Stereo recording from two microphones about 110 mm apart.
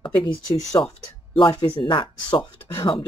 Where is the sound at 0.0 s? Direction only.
40° left (ahead or behind).